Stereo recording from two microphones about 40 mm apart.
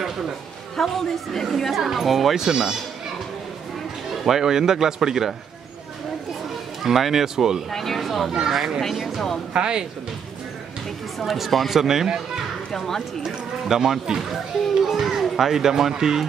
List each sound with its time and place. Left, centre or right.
0.7 s speech: centre
2.4 s speech: centre
4.2 s speech: centre
6.8 s speech: centre
7.7 s speech: centre
9.5 s speech: right
11.1 s speech: centre
12.7 s speech: centre
13.2 s a child's voice: centre